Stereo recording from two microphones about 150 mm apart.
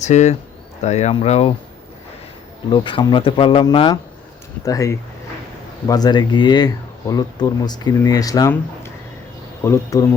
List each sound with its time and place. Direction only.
0.0 s speech: 50° left (ahead or behind)
2.6 s speech: 35° left (ahead or behind)